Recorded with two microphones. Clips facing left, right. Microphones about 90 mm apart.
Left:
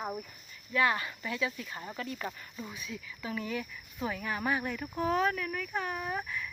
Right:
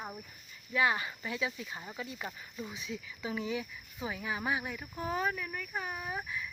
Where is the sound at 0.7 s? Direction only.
20° right (ahead or behind).